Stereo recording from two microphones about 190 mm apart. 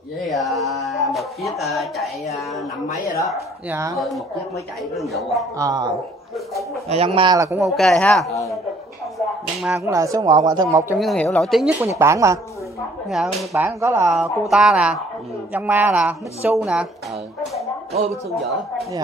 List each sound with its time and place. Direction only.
0.3 s speech: centre (ahead or behind)
3.3 s a woman's voice: 10° right (ahead or behind)
3.9 s speech: centre (ahead or behind)
5.6 s speech: 20° right (ahead or behind)
6.9 s speech: 30° right (ahead or behind)
7.6 s speech: centre (ahead or behind)
9.8 s a woman's voice: 15° right (ahead or behind)
11.0 s speech: centre (ahead or behind)
11.8 s a woman's voice: 15° right (ahead or behind)
13.1 s speech: centre (ahead or behind)
13.5 s a woman's voice: 10° right (ahead or behind)
14.2 s a woman's voice: centre (ahead or behind)